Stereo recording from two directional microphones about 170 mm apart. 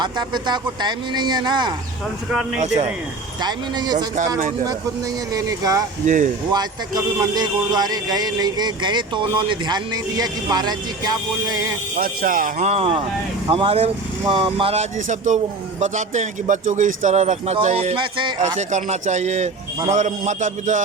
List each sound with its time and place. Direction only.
0.0 s speech: 25° right (ahead or behind)
3.4 s speech: 25° right (ahead or behind)
5.3 s speech: 20° right (ahead or behind)
6.0 s speech: 50° right (ahead or behind)
6.5 s speech: 25° right (ahead or behind)
11.9 s speech: 55° right (ahead or behind)
12.6 s speech: 35° right (ahead or behind)
17.9 s speech: 30° right (ahead or behind)
18.7 s speech: 45° right (ahead or behind)